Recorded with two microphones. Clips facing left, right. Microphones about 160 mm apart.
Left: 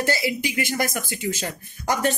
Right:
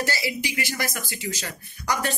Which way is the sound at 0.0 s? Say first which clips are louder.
Left 4 dB; 50° left (ahead or behind).